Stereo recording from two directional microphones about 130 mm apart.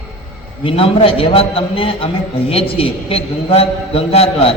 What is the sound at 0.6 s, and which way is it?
A man's voice, 45° left (ahead or behind).